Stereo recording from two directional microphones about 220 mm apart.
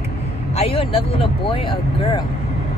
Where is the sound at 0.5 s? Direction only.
25° left (ahead or behind).